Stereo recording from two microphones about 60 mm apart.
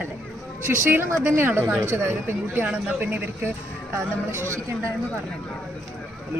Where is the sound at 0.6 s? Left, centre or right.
Right.